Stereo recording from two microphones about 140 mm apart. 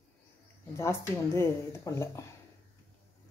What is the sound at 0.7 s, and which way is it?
Speech, 20° left (ahead or behind).